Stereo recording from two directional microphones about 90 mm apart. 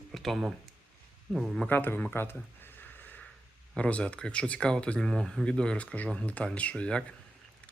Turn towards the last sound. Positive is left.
turn(degrees=10)  # may be behind; listen again after turning